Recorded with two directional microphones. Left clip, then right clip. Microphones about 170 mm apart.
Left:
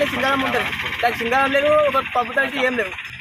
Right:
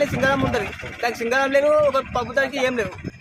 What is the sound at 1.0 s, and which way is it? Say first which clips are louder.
Speech: left 2 dB; 20° right (ahead or behind).